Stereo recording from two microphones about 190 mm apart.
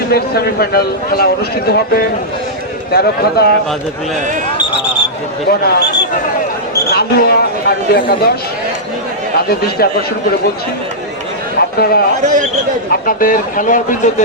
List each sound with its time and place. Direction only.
0.1 s a man's voice: 55° left (ahead or behind)
5.5 s a man's voice: 55° left (ahead or behind)
9.5 s a man's voice: 55° left (ahead or behind)
11.8 s speech: 55° left (ahead or behind)
12.2 s a man's voice: 40° right (ahead or behind)
12.9 s speech: 50° left (ahead or behind)